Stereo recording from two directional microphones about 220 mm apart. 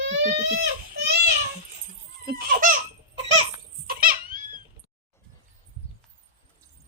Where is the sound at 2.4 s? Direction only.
40° right (ahead or behind).